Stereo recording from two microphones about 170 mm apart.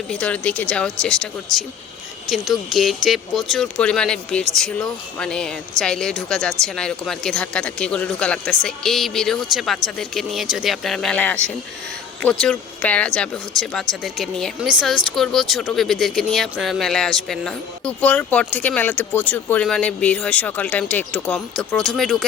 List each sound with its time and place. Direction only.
0.1 s speech: 5° left (ahead or behind)
2.3 s speech: centre (ahead or behind)